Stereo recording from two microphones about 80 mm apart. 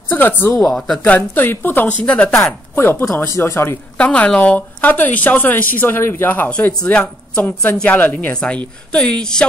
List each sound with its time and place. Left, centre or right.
0.1 s a woman's voice: left
0.6 s speech: centre
1.0 s a woman's voice: left
2.0 s speech: centre
2.7 s a woman's voice: left
4.0 s a woman's voice: centre
6.8 s speech: centre